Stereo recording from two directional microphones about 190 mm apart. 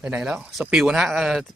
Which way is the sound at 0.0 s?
5° right (ahead or behind).